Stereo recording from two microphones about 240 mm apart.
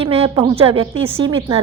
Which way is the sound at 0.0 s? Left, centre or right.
Right.